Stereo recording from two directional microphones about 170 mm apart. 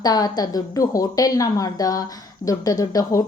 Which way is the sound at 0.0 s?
25° left (ahead or behind).